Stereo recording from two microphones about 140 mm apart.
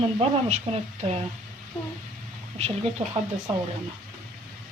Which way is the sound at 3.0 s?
45° right (ahead or behind).